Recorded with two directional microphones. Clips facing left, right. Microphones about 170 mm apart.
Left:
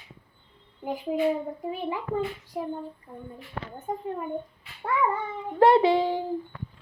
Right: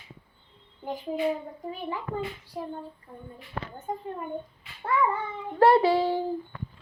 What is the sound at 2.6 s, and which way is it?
Child singing, 15° left (ahead or behind).